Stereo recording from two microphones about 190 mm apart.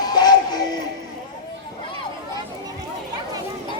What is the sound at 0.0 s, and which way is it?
Music, 20° left (ahead or behind).